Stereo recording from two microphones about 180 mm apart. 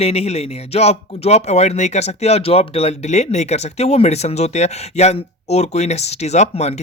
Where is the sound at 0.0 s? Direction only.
35° left (ahead or behind).